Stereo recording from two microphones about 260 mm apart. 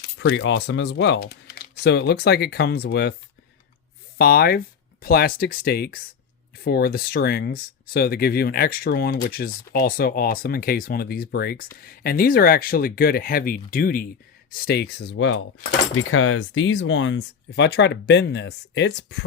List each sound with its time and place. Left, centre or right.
0.0 s speech: left
4.2 s speech: left